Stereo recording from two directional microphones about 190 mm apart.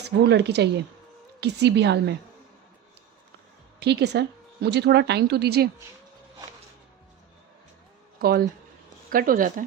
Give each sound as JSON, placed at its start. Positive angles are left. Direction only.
{"t": 0.0, "sound": "speech", "side_deg": -65}
{"t": 3.8, "sound": "speech", "side_deg": -60}
{"t": 8.2, "sound": "a woman's voice", "side_deg": -55}